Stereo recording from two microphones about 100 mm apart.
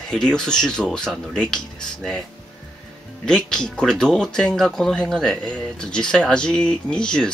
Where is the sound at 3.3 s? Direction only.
10° left (ahead or behind).